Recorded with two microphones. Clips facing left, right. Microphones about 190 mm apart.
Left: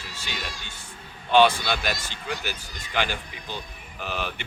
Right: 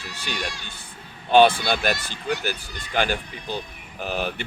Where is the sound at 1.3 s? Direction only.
50° right (ahead or behind).